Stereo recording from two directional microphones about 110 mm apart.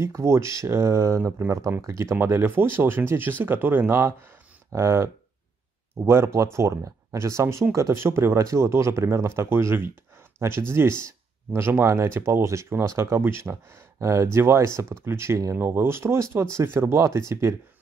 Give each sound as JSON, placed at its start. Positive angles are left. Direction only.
{"t": 0.0, "sound": "speech", "side_deg": -25}